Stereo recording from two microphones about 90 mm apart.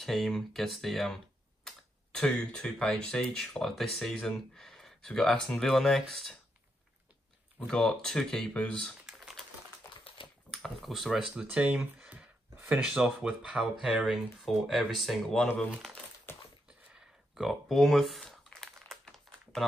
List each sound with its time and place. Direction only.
0.0 s speech: centre (ahead or behind)
7.7 s speech: 5° left (ahead or behind)
9.0 s typing: 5° right (ahead or behind)
9.8 s typewriter: 30° left (ahead or behind)
10.5 s speech: 5° left (ahead or behind)
16.3 s a sound: 25° left (ahead or behind)
17.4 s crumpling: centre (ahead or behind)